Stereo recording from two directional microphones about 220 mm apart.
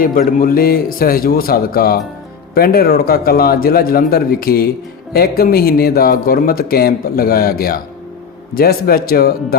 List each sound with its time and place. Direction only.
0.0 s speech: 40° left (ahead or behind)